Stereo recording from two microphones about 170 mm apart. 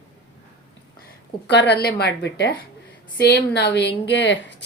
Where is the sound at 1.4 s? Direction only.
85° left.